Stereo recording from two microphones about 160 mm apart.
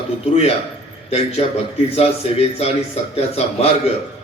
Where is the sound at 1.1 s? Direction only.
40° left (ahead or behind).